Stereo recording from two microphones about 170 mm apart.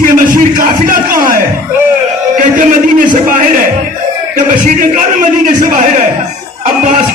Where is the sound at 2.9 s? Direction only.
50° right (ahead or behind).